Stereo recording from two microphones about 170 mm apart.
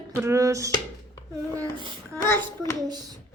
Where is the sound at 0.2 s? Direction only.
15° right (ahead or behind).